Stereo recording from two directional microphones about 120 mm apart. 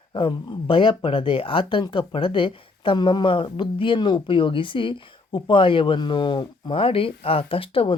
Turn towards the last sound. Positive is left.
turn(degrees=50)  # may be behind; listen again after turning